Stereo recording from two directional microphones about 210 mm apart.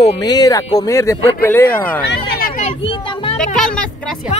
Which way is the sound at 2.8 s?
25° left (ahead or behind).